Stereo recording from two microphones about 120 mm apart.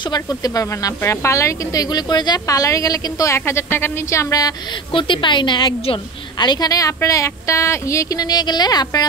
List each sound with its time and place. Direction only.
0.1 s speech: 30° left (ahead or behind)
4.9 s a woman's voice: 45° left (ahead or behind)